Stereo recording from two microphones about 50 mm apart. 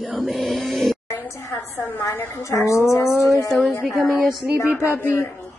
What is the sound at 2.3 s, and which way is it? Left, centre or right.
Speech, left.